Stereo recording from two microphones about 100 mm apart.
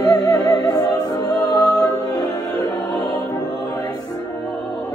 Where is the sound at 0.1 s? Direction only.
40° left (ahead or behind).